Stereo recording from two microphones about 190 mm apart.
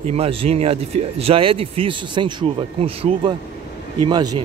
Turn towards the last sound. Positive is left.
turn(degrees=-25)  # may be behind; listen again after turning